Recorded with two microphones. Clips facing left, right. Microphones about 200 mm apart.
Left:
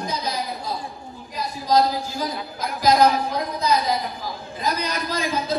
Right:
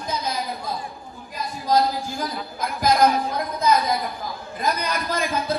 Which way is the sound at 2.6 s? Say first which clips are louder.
Left 1 dB; 55° right (ahead or behind).